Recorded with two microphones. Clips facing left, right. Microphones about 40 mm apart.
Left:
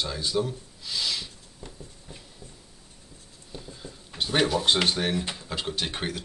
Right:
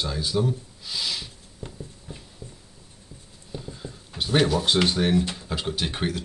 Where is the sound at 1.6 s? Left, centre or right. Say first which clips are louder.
Right 5 dB; centre.